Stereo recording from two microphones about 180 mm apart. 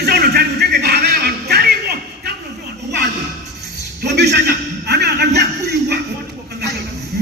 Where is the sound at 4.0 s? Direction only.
70° right (ahead or behind).